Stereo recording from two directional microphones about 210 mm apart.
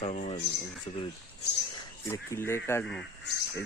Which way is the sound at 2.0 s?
10° left (ahead or behind).